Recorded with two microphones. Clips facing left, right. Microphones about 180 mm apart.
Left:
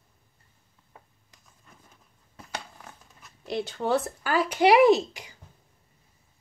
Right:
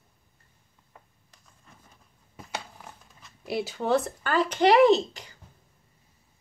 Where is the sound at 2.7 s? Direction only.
5° right (ahead or behind); by 5.3 s 10° left (ahead or behind).